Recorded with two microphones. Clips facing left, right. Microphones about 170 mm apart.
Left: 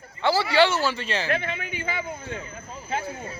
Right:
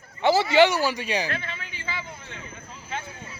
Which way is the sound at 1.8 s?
50° left (ahead or behind).